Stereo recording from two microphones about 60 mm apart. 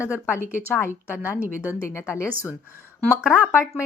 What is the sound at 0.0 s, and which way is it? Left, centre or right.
Speech, left.